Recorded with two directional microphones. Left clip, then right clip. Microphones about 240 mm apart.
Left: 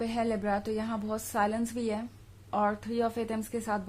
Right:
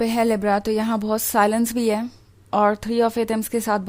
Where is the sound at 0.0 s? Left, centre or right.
Right.